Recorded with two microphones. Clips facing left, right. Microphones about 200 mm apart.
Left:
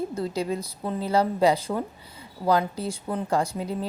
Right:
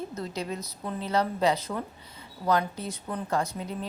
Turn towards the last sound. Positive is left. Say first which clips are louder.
# left 4 dB
turn(degrees=35)  # may be behind; listen again after turning